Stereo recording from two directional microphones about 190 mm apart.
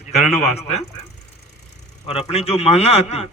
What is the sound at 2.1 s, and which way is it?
A man's voice, 35° left (ahead or behind).